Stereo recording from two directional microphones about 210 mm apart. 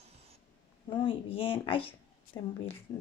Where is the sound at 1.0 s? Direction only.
25° left (ahead or behind).